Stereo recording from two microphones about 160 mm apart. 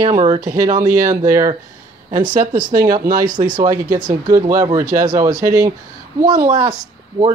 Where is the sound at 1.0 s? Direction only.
20° right (ahead or behind).